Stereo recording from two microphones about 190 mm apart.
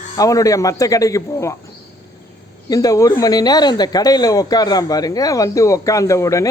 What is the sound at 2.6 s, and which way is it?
Speech, 20° left (ahead or behind).